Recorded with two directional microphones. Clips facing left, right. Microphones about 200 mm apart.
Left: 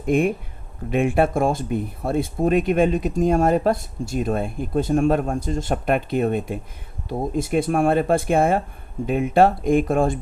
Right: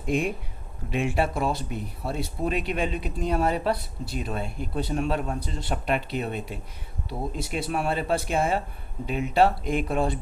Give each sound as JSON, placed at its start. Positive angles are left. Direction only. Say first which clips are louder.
{"t": 0.1, "sound": "speech", "louder": "left 7 dB", "side_deg": 55}